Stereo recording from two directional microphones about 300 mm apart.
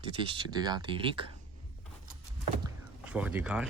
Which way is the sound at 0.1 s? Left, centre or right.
Centre.